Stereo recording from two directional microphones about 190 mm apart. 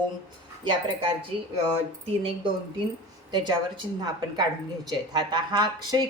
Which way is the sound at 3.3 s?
25° right (ahead or behind).